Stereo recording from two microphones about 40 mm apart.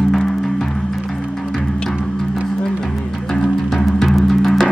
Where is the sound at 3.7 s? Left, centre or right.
Centre.